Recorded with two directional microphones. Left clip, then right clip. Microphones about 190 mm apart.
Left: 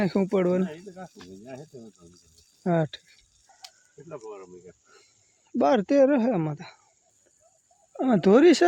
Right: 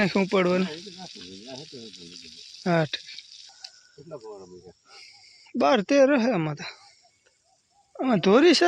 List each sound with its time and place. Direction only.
0.0 s speech: 10° left (ahead or behind)
1.0 s speech: 45° left (ahead or behind)
2.6 s speech: 10° left (ahead or behind)
4.1 s speech: 15° right (ahead or behind)
5.5 s speech: 20° left (ahead or behind)
7.9 s speech: 20° left (ahead or behind)